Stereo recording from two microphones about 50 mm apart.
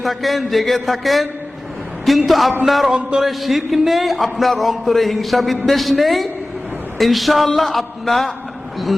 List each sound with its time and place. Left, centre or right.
0.0 s speech: centre
2.9 s a sound: right
3.2 s speech: centre